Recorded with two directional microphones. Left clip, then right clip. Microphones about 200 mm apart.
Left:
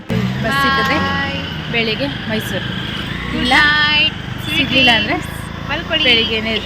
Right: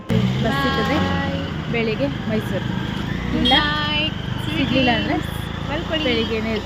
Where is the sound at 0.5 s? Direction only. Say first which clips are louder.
Left 8 dB; 10° right (ahead or behind).